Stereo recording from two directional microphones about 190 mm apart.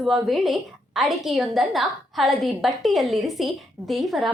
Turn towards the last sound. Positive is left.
turn(degrees=0)  # may be behind; listen again after turning